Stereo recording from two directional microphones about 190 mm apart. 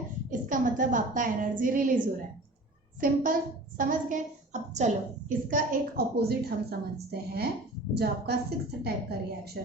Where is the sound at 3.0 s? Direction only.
45° right (ahead or behind).